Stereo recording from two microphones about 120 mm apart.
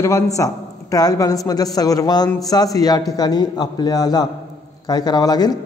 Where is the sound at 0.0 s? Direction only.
25° left (ahead or behind).